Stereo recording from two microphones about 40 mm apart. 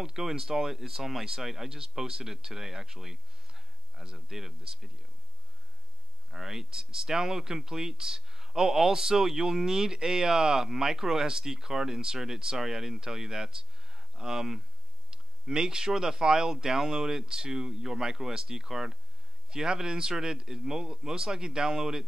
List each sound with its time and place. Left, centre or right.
0.0 s speech: centre
6.3 s speech: centre